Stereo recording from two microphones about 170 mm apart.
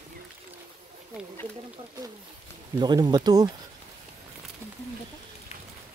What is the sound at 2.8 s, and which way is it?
Speech, 25° right (ahead or behind).